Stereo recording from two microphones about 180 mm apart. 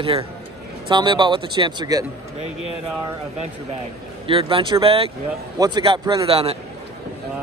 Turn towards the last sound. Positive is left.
turn(degrees=-35)  # may be behind; listen again after turning